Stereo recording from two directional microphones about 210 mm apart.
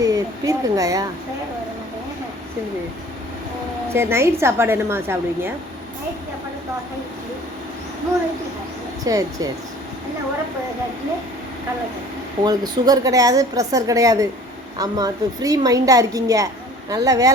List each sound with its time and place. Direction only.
0.0 s speech: 15° right (ahead or behind)
3.9 s a woman's voice: 10° right (ahead or behind)
9.0 s a woman's voice: 15° right (ahead or behind)
12.4 s a woman's voice: 20° right (ahead or behind)